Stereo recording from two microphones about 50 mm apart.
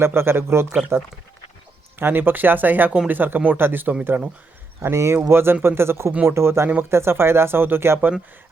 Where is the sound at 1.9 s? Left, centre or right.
Right.